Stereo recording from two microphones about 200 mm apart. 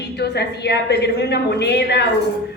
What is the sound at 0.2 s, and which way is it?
A woman's voice, 55° left (ahead or behind).